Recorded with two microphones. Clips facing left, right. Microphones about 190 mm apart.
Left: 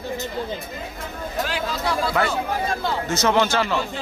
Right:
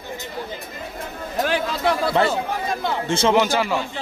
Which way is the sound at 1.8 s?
25° right (ahead or behind).